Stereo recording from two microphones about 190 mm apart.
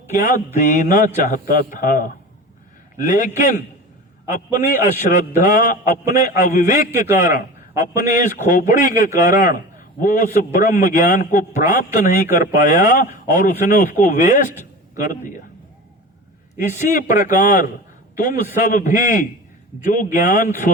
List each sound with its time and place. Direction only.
0.1 s a man's voice: 40° left (ahead or behind)
16.6 s a man's voice: 45° left (ahead or behind)